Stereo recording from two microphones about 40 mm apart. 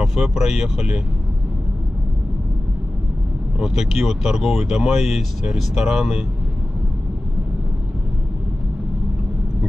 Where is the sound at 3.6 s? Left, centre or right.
Centre.